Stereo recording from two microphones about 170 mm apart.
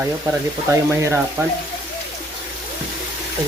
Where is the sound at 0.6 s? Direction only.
15° right (ahead or behind).